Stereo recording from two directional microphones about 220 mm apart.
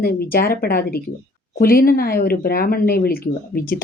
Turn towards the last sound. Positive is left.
turn(degrees=40)  # may be behind; listen again after turning